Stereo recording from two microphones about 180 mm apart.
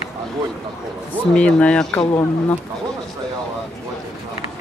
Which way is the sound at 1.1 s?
5° left (ahead or behind).